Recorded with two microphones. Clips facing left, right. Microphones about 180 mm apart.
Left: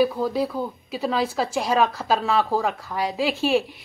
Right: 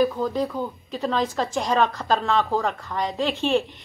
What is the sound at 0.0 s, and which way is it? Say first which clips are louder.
Speech: left 1 dB; 5° left (ahead or behind).